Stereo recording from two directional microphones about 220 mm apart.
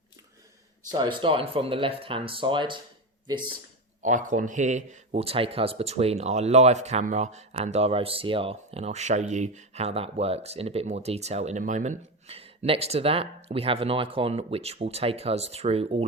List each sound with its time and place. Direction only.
0.9 s speech: 20° right (ahead or behind)
4.0 s speech: 35° right (ahead or behind)